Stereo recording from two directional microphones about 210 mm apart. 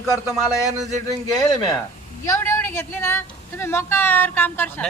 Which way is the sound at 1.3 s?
20° left (ahead or behind).